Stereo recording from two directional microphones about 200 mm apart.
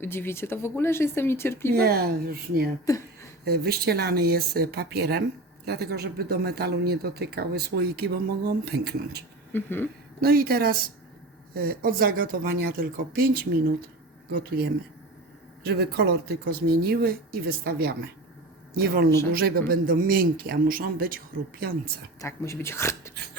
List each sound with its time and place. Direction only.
0.0 s speech: 10° left (ahead or behind)
1.7 s speech: 50° right (ahead or behind)
2.9 s speech: 15° left (ahead or behind)
3.4 s speech: 55° right (ahead or behind)
9.5 s speech: 10° left (ahead or behind)
10.2 s speech: 50° right (ahead or behind)
22.2 s speech: 15° left (ahead or behind)